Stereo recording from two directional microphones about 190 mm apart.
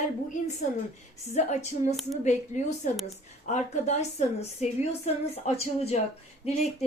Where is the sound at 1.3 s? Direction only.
35° left (ahead or behind).